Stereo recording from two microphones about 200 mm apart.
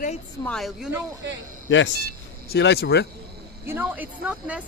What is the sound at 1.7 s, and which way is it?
A man's voice, 65° left (ahead or behind).